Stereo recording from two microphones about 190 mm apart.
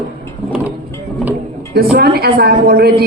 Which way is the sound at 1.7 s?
55° right (ahead or behind).